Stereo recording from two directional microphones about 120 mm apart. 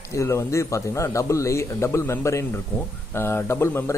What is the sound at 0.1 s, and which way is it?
A man's voice, 25° left (ahead or behind).